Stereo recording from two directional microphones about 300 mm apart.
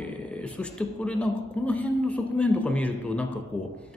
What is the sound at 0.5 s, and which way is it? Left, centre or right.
A man's voice, centre.